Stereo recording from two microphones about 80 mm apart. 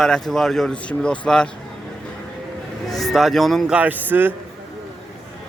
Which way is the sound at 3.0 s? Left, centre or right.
Centre.